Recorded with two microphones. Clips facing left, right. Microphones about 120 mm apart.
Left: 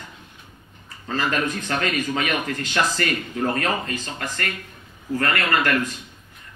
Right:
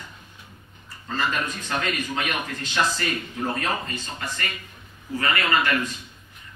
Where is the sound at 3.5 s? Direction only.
80° left.